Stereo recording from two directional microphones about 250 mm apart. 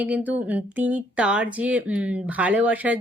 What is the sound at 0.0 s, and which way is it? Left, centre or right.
A woman's voice, centre.